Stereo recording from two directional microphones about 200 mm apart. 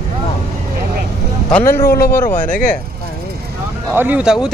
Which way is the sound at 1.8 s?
50° left (ahead or behind).